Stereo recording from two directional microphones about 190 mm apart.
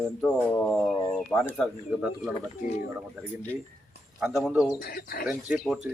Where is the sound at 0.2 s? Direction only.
5° left (ahead or behind).